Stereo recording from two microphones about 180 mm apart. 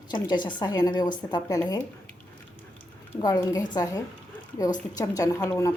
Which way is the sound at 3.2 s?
20° left (ahead or behind).